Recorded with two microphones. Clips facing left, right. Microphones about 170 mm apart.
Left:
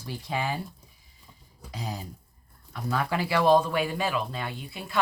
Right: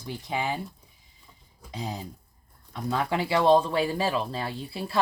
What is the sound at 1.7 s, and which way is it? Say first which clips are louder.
Speech: right 2 dB; 25° right (ahead or behind).